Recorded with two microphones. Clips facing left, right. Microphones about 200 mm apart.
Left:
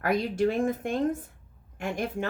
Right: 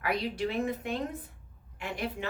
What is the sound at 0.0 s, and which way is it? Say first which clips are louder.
Speech: left 6 dB; 45° left (ahead or behind).